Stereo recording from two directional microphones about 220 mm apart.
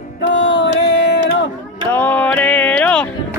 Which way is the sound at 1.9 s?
10° left (ahead or behind).